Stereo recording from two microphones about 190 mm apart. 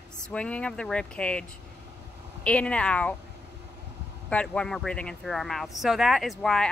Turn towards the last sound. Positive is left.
turn(degrees=0)  # may be behind; listen again after turning